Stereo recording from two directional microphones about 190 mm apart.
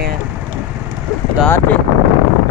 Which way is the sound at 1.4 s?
10° left (ahead or behind).